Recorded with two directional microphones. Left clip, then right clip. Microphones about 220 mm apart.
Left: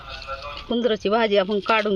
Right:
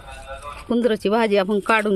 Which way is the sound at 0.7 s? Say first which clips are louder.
Right 2 dB; 20° right (ahead or behind).